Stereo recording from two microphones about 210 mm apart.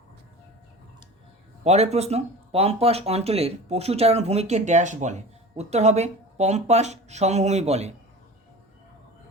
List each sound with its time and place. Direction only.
1.6 s speech: 30° right (ahead or behind)